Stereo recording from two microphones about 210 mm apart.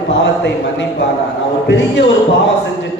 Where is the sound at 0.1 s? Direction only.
60° left (ahead or behind).